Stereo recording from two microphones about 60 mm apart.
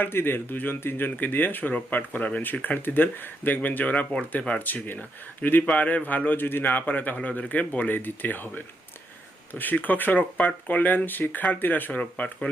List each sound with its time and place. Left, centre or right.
0.0 s a man's voice: left